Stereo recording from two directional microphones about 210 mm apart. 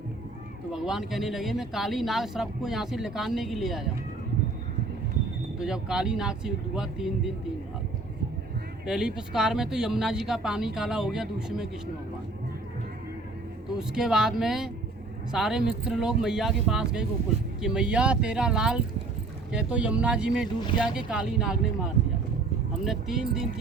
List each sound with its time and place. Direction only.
0.7 s speech: centre (ahead or behind)
5.5 s speech: 5° right (ahead or behind)
8.9 s speech: 5° right (ahead or behind)
13.7 s speech: centre (ahead or behind)
22.0 s vehicle: 55° right (ahead or behind)
22.8 s speech: centre (ahead or behind)